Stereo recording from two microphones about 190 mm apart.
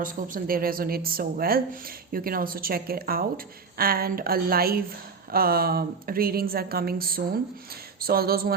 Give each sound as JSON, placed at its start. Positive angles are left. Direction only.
{"t": 0.0, "sound": "a woman's voice", "side_deg": -50}